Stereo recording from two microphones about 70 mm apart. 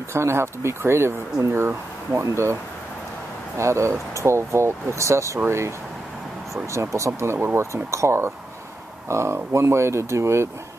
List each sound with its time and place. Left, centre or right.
0.1 s speech: right
3.5 s speech: right
6.7 s speech: right
7.3 s speech: right
7.7 s speech: right